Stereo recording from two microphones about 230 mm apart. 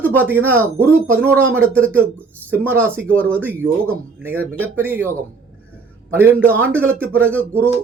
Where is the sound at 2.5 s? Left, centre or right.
Centre.